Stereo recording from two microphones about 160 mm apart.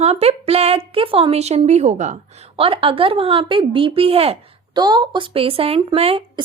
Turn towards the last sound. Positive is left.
turn(degrees=-35)  # may be behind; listen again after turning